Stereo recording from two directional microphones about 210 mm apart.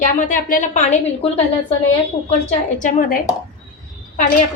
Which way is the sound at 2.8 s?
35° left (ahead or behind).